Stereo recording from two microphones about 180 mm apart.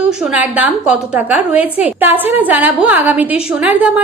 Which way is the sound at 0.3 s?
10° right (ahead or behind).